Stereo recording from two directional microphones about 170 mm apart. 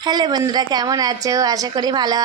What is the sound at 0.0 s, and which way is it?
A woman's voice, 25° right (ahead or behind).